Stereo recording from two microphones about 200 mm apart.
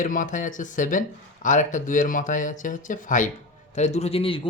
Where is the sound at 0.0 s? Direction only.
40° left (ahead or behind).